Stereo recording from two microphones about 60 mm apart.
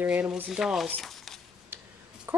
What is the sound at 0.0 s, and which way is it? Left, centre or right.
Sanding, centre.